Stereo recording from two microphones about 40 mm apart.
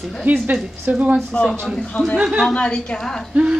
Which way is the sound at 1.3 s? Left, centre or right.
Left.